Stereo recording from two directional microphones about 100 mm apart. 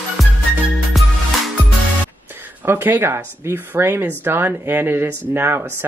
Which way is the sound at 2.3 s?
20° right (ahead or behind).